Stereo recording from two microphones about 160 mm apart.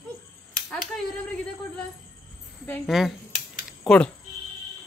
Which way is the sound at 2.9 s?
Centre (ahead or behind).